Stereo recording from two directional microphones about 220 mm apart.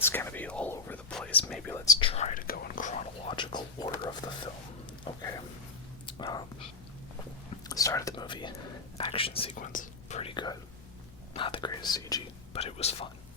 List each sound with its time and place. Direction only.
0.0 s whispering: 10° left (ahead or behind)
1.5 s speech: 5° left (ahead or behind)
6.1 s whispering: 20° left (ahead or behind)
7.7 s whispering: 15° left (ahead or behind)
9.0 s speech: 25° left (ahead or behind)
9.7 s whispering: 30° left (ahead or behind)
11.3 s speech: 25° left (ahead or behind)
12.5 s speech: 30° left (ahead or behind)